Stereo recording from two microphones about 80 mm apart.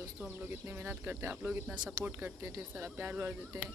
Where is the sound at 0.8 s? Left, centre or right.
Right.